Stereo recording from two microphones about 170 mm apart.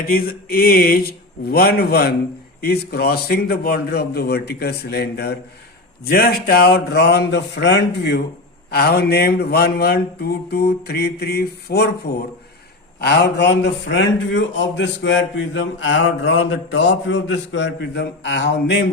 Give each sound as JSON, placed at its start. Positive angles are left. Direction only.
{"t": 0.1, "sound": "speech", "side_deg": 60}
{"t": 2.6, "sound": "mantra", "side_deg": 65}
{"t": 6.1, "sound": "mantra", "side_deg": 65}
{"t": 8.7, "sound": "mantra", "side_deg": 70}
{"t": 13.0, "sound": "a man's voice", "side_deg": 80}